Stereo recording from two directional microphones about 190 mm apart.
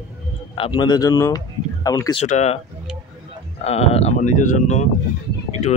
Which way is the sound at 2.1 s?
35° left (ahead or behind).